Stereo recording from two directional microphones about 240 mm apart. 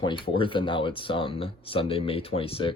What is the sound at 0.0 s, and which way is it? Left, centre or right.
Speech, left.